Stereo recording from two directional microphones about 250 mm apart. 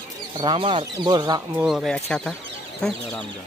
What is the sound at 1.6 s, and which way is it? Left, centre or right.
Speech, centre.